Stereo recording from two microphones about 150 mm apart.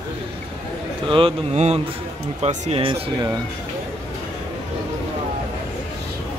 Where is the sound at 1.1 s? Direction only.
35° right (ahead or behind).